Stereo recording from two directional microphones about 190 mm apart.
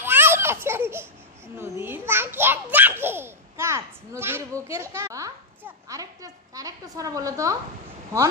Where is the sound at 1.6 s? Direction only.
10° right (ahead or behind).